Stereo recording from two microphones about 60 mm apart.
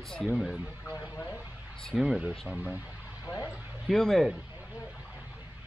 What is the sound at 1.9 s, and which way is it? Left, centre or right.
Speech, centre.